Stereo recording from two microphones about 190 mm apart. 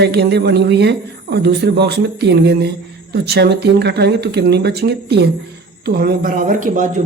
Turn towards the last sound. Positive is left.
turn(degrees=-40)  # may be behind; listen again after turning